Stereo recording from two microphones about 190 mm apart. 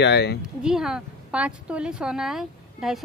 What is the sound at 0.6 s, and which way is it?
Speech, 5° right (ahead or behind).